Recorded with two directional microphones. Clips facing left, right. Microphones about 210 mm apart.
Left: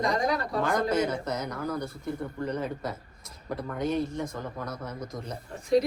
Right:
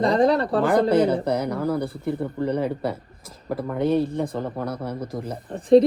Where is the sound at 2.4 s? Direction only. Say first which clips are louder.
Right 8 dB; 15° right (ahead or behind).